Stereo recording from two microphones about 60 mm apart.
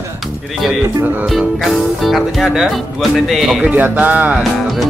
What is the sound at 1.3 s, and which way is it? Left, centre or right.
Speech, centre.